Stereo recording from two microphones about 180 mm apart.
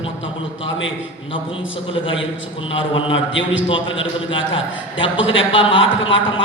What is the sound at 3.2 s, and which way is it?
A man's voice, 90° left.